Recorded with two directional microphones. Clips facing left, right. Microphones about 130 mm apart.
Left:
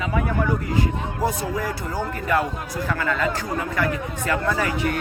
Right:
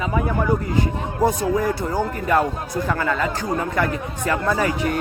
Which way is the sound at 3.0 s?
30° right (ahead or behind).